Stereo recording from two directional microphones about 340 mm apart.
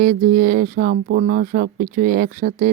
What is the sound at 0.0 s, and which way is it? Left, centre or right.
Speech, right.